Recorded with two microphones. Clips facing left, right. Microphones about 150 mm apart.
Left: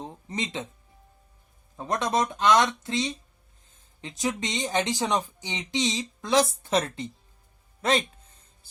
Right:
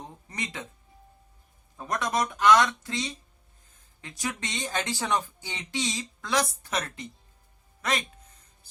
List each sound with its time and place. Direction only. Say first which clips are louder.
0.0 s music: left 5 dB; 25° left (ahead or behind)
1.7 s speech: left 3 dB; 25° left (ahead or behind)